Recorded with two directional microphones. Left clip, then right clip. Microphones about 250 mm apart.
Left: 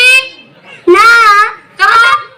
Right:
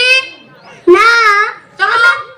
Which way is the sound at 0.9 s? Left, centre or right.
Centre.